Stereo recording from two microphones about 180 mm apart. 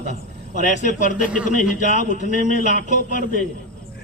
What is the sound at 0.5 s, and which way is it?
Speech, 45° left (ahead or behind).